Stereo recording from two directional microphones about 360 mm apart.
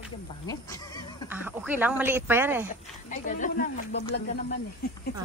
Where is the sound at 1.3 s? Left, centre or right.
Centre.